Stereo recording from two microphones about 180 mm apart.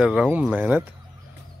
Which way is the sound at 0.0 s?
5° right (ahead or behind).